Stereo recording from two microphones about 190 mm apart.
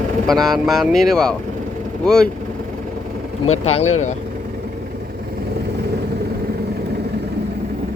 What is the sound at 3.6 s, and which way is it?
Speech, 35° left (ahead or behind).